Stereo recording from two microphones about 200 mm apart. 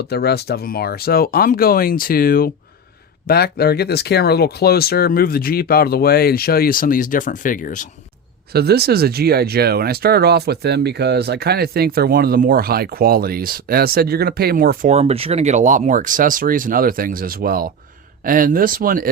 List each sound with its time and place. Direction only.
0.1 s speech: 50° left (ahead or behind)
8.5 s speech: 50° right (ahead or behind)